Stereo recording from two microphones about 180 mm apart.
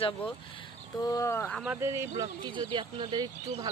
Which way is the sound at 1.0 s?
20° left (ahead or behind).